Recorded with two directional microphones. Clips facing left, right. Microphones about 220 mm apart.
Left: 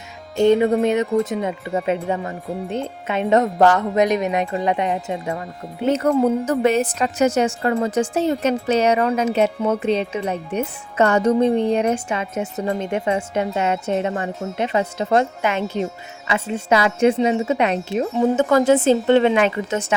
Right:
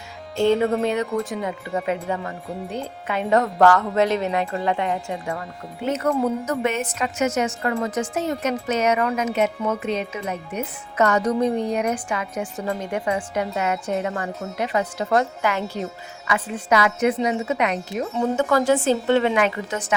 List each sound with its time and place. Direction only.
0.3 s speech: 15° left (ahead or behind)